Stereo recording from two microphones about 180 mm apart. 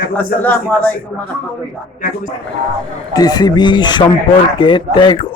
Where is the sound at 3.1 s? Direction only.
20° left (ahead or behind).